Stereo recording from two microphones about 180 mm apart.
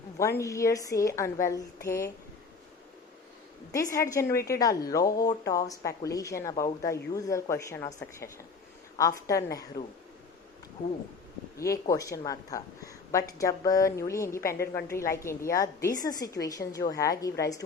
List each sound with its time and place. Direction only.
0.2 s a woman's voice: 15° left (ahead or behind)
3.7 s a woman's voice: 20° left (ahead or behind)
9.0 s a woman's voice: 20° left (ahead or behind)
11.5 s a woman's voice: 15° left (ahead or behind)